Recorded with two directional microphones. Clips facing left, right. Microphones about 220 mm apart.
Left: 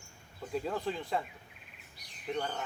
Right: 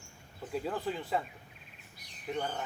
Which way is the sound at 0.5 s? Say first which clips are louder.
Even; 5° right (ahead or behind).